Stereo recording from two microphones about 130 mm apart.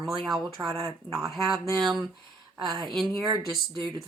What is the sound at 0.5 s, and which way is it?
Speech, 30° right (ahead or behind).